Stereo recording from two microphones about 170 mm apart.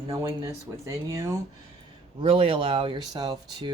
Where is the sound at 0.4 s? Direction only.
20° right (ahead or behind).